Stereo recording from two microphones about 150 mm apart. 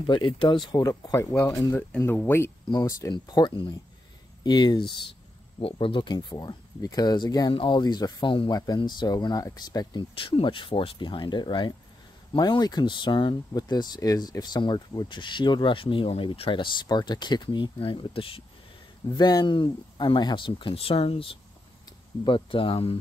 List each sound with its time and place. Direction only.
0.0 s speech: 30° left (ahead or behind)